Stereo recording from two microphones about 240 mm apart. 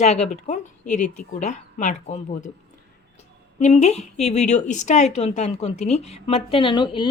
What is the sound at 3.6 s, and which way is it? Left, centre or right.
A woman's voice, left.